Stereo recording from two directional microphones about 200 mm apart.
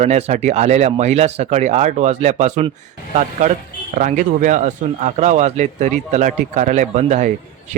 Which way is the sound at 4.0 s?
40° right (ahead or behind).